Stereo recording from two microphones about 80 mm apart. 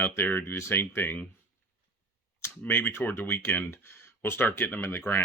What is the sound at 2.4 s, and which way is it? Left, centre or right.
Speech, left.